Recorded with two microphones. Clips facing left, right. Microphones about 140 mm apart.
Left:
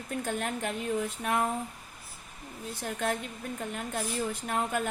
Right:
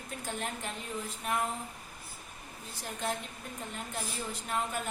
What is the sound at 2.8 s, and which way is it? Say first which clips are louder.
Speech: left 4 dB; 55° left (ahead or behind).